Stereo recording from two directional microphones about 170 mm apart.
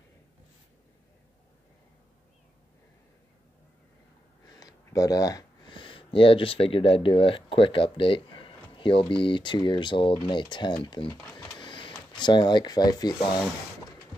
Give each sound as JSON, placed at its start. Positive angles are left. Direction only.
{"t": 4.5, "sound": "speech", "side_deg": 20}
{"t": 11.2, "sound": "a sound", "side_deg": 25}
{"t": 12.1, "sound": "speech", "side_deg": 25}